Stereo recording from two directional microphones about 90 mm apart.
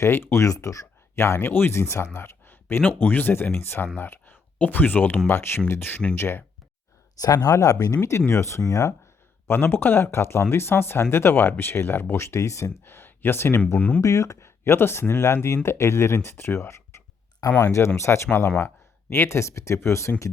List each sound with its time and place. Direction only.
0.0 s speech: 25° left (ahead or behind)
2.1 s a sound: 25° left (ahead or behind)
3.0 s speech: 20° left (ahead or behind)
7.2 s speech: 45° left (ahead or behind)
8.3 s speech: 30° left (ahead or behind)
9.5 s speech: 25° left (ahead or behind)
14.0 s speech: 35° left (ahead or behind)